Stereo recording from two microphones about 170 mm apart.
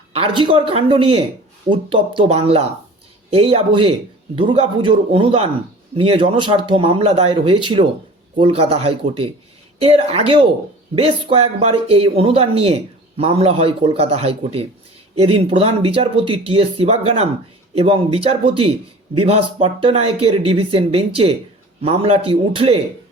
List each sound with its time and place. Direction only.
0.1 s speech: 30° right (ahead or behind)